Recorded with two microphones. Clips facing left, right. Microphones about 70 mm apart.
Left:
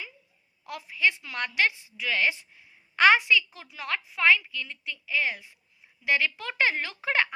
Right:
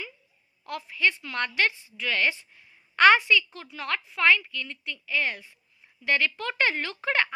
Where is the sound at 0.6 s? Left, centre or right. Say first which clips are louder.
Even; centre.